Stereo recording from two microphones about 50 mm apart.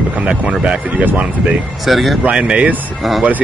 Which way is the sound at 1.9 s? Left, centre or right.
Centre.